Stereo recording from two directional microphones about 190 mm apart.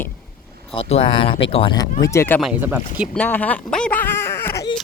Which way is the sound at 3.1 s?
10° left (ahead or behind).